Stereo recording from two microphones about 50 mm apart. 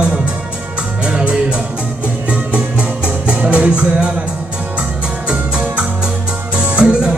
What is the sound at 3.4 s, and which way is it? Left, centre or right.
Speech, right.